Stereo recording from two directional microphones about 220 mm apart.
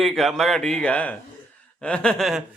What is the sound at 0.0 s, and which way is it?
Speech, centre (ahead or behind).